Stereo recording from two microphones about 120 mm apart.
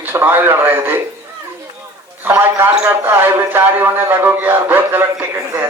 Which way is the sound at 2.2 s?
20° right (ahead or behind).